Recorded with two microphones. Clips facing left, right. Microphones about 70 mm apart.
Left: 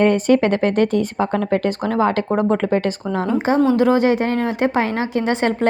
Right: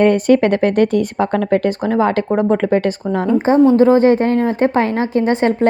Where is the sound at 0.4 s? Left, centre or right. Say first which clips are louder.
Right 3 dB; right.